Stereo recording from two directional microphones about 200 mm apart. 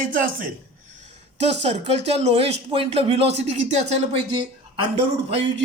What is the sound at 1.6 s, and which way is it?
Speech, 30° right (ahead or behind).